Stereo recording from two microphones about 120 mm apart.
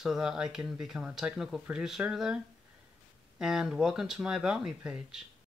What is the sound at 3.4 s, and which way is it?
Speech, 5° right (ahead or behind).